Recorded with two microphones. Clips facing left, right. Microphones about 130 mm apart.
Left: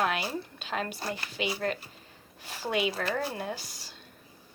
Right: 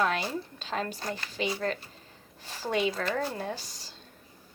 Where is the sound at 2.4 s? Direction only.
40° right (ahead or behind).